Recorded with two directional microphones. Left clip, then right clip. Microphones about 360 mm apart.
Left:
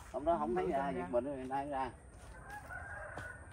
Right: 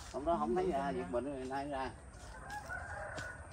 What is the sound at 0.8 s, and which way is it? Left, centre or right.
Speech, left.